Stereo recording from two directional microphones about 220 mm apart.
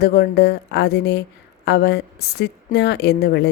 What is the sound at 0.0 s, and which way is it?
Speech, 45° left (ahead or behind).